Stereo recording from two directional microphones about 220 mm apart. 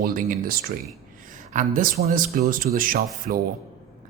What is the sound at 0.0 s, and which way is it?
Speech, 40° right (ahead or behind).